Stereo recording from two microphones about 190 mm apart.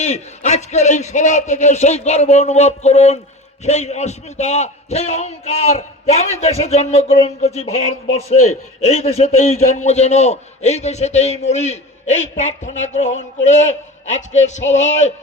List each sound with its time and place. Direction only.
0.0 s speech: 35° left (ahead or behind)